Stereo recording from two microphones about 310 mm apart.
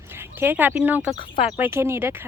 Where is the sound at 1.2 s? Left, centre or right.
Centre.